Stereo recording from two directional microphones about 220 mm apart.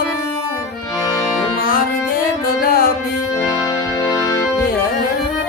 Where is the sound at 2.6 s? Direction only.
40° left (ahead or behind).